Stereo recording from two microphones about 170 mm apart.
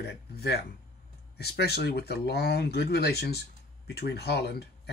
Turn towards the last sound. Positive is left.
turn(degrees=70)  # may be behind; listen again after turning